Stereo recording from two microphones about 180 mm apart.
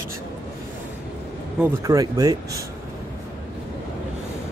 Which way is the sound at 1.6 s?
15° right (ahead or behind).